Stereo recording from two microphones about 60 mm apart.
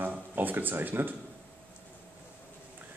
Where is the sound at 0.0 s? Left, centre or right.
Right.